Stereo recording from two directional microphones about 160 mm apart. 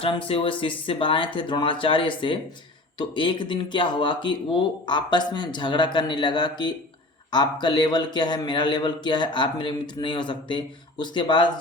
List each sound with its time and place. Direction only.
0.0 s speech: 35° left (ahead or behind)